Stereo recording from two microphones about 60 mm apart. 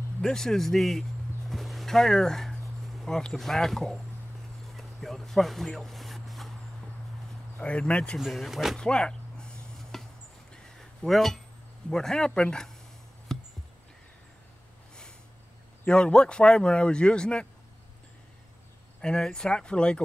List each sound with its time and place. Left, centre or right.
0.2 s speech: centre
1.5 s a sound: centre
3.2 s speech: centre
4.6 s a sound: centre
7.5 s speech: centre
8.2 s speech: centre
8.7 s a sound: centre
11.1 s speech: centre
15.9 s speech: centre
18.9 s speech: centre